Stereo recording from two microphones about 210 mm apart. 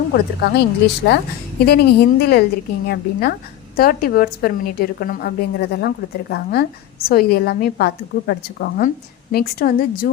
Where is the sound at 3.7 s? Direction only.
45° left (ahead or behind).